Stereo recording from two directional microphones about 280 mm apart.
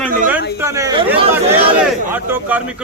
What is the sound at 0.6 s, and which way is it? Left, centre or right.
Chatter, centre.